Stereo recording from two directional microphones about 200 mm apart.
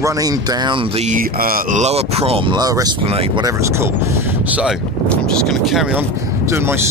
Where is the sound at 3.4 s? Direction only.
15° right (ahead or behind).